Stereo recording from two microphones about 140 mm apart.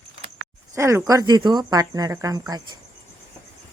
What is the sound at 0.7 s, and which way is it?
Speech, 20° right (ahead or behind).